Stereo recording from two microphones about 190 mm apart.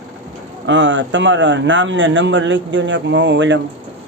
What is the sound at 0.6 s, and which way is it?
A man's voice, 75° right (ahead or behind).